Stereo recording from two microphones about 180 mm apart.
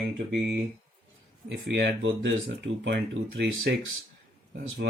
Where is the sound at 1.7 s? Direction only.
80° right.